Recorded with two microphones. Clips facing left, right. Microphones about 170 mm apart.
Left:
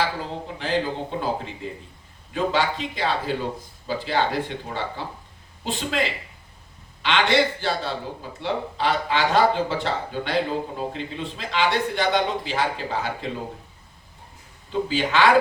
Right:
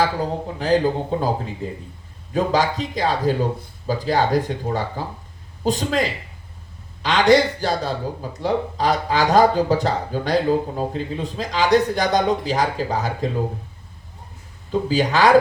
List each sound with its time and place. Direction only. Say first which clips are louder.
0.0 s speech: right 5 dB; 40° right (ahead or behind)
14.7 s speech: right 4 dB; 40° right (ahead or behind)